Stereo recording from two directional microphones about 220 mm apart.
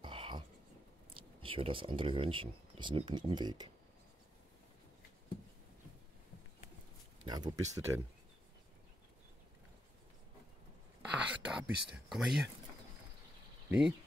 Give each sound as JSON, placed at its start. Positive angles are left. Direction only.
{"t": 0.0, "sound": "whispering", "side_deg": -20}
{"t": 1.1, "sound": "speech", "side_deg": -25}
{"t": 7.2, "sound": "speech", "side_deg": -20}
{"t": 11.0, "sound": "a sound", "side_deg": -5}
{"t": 13.7, "sound": "speech", "side_deg": -5}